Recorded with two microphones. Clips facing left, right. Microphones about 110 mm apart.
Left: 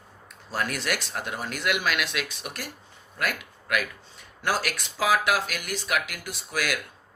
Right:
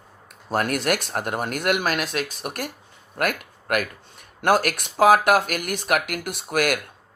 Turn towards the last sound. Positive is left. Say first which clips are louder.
# right 7 dB
turn(degrees=-55)  # may be behind; listen again after turning